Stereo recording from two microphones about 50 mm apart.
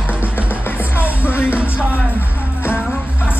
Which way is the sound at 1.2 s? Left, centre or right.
Left.